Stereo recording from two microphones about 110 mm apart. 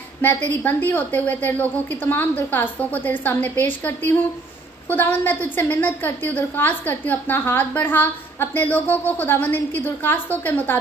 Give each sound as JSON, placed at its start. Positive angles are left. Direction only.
{"t": 0.2, "sound": "a woman's voice", "side_deg": 15}